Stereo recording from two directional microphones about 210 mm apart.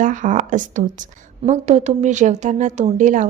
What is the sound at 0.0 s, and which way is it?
A woman's voice, 40° right (ahead or behind).